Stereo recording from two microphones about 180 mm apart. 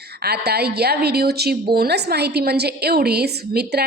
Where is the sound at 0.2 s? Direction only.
60° right (ahead or behind).